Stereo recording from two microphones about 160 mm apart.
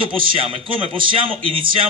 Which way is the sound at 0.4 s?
35° right (ahead or behind).